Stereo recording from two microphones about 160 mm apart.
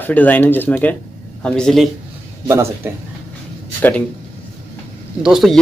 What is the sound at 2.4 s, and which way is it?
Speech, 15° right (ahead or behind).